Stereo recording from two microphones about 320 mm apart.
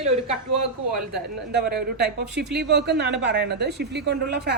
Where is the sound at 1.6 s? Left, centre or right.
Right.